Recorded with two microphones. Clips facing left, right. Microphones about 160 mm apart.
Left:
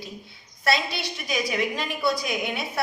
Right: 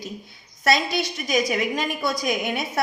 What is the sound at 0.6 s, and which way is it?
A woman's voice, 45° right (ahead or behind).